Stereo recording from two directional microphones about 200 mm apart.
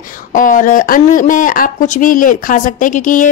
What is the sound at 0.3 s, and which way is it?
Speech, 40° left (ahead or behind).